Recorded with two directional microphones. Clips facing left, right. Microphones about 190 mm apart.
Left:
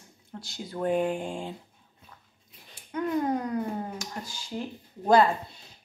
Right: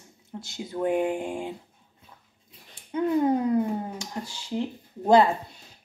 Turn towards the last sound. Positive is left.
turn(degrees=-25)  # may be behind; listen again after turning